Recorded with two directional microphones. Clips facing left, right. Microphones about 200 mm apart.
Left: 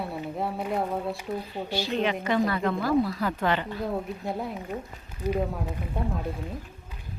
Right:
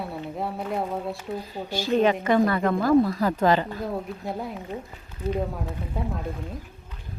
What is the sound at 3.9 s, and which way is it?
Speech, centre (ahead or behind).